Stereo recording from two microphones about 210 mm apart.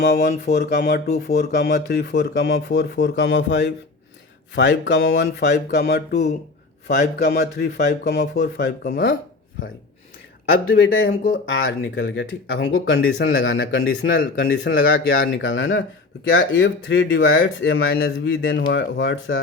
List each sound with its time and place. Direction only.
0.0 s speech: 50° left (ahead or behind)
11.0 s speech: 45° left (ahead or behind)
11.4 s speech: 60° left (ahead or behind)